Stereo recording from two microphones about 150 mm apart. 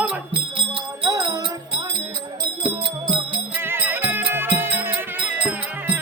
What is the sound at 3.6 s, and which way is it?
Music, 15° right (ahead or behind).